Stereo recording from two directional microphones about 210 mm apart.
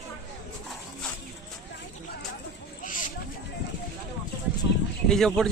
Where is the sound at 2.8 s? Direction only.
40° left (ahead or behind).